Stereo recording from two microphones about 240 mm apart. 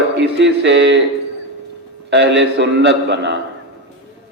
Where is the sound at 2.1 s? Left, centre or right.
Right.